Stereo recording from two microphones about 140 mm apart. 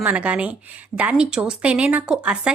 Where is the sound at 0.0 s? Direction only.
10° right (ahead or behind).